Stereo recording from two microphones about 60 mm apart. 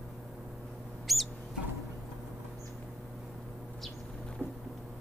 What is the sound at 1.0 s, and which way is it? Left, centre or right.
Bird, centre.